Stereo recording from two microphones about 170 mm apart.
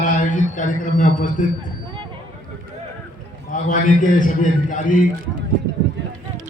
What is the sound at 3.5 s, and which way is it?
A man's voice, 50° left (ahead or behind).